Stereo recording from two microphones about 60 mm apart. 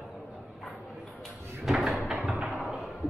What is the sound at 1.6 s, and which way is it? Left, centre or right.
Door, centre.